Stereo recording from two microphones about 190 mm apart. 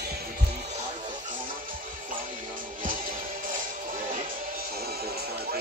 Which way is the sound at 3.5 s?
45° right (ahead or behind).